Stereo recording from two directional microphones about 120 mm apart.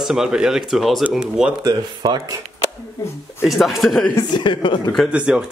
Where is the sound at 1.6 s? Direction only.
35° right (ahead or behind).